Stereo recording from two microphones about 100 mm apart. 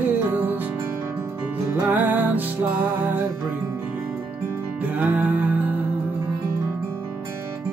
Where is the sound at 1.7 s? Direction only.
20° right (ahead or behind).